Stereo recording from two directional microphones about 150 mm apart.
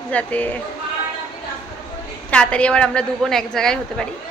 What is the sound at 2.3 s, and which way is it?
A woman's voice, 5° left (ahead or behind).